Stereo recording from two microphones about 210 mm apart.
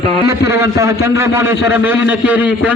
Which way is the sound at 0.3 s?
15° right (ahead or behind).